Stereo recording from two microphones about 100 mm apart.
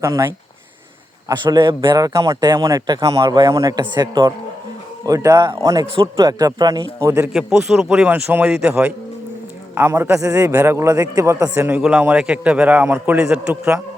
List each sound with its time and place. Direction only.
0.0 s a man's voice: 30° right (ahead or behind)
3.8 s a man's voice: 45° right (ahead or behind); by 7.3 s 30° right (ahead or behind)
7.3 s a man's voice: 5° right (ahead or behind)
8.0 s a man's voice: 20° right (ahead or behind)
11.8 s a man's voice: 10° right (ahead or behind)